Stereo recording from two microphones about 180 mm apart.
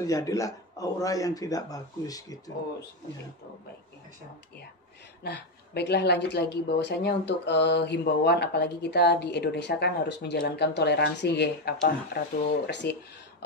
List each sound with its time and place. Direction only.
0.0 s a man's voice: 20° left (ahead or behind)
5.2 s a woman's voice: 65° left (ahead or behind)